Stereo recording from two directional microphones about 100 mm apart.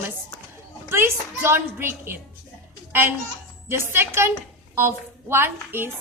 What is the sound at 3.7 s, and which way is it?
A woman's voice, 25° right (ahead or behind).